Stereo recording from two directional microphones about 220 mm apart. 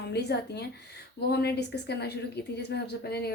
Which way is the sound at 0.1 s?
50° left (ahead or behind).